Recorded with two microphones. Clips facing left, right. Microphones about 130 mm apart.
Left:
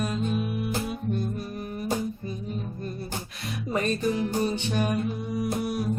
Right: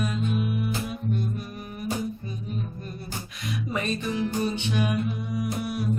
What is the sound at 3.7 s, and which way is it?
Music, 40° left (ahead or behind).